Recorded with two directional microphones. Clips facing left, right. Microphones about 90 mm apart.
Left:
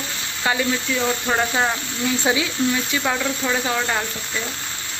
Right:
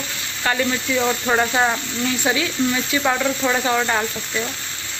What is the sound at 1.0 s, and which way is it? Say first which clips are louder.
Speech: right 4 dB; 10° right (ahead or behind).